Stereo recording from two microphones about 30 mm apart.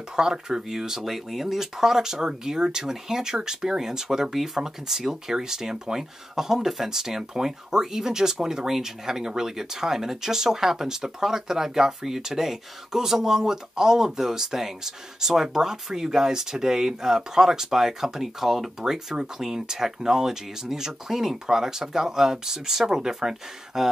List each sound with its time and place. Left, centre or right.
0.1 s speech: centre
5.1 s speech: right